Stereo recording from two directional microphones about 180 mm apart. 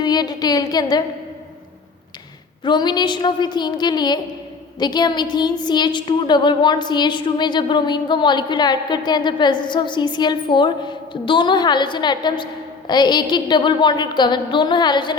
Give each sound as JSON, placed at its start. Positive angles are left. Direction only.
{"t": 0.0, "sound": "a woman's voice", "side_deg": 20}
{"t": 2.6, "sound": "a woman's voice", "side_deg": 25}